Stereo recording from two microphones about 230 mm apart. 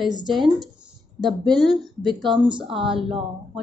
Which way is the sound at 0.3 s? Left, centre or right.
Centre.